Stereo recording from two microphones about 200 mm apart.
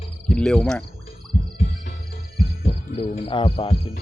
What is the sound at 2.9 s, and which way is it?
Speech, 25° left (ahead or behind).